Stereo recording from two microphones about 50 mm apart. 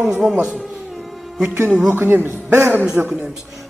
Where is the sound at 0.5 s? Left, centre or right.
Centre.